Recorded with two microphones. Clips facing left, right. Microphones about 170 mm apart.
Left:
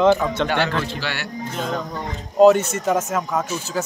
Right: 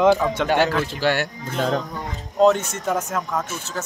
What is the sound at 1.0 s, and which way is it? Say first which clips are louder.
Speech: right 8 dB; 45° right (ahead or behind).